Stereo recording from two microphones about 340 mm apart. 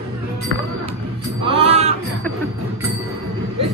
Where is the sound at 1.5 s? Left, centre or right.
Centre.